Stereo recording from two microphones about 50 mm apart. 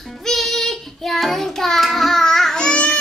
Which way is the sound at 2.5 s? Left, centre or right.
Centre.